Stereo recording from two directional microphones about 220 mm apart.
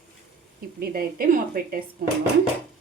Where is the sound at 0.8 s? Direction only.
40° right (ahead or behind).